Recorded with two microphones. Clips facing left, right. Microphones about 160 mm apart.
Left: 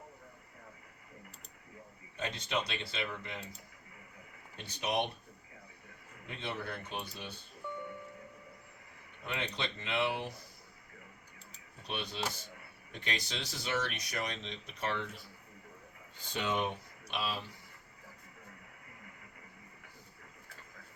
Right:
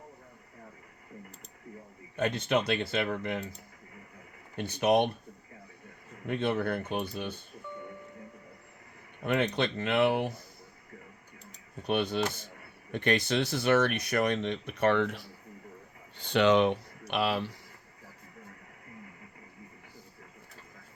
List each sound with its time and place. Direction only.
2.1 s a man's voice: 55° right (ahead or behind)
4.5 s speech: 55° right (ahead or behind)
6.2 s speech: 55° right (ahead or behind)
9.2 s speech: 55° right (ahead or behind)
11.8 s speech: 55° right (ahead or behind)